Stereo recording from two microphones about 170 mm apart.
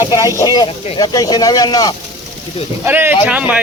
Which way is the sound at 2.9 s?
10° right (ahead or behind).